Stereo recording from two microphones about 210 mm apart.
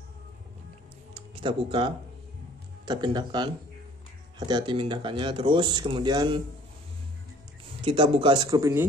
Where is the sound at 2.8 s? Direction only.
20° right (ahead or behind).